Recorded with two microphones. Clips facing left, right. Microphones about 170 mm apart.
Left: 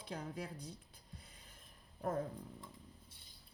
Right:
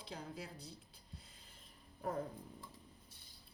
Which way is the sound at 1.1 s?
55° left (ahead or behind).